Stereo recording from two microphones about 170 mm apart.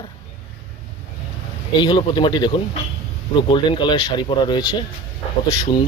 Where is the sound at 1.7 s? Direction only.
25° left (ahead or behind).